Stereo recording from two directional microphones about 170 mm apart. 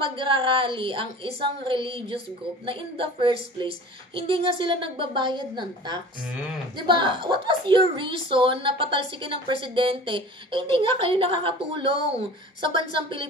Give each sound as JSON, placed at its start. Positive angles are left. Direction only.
{"t": 0.0, "sound": "a woman's voice", "side_deg": -30}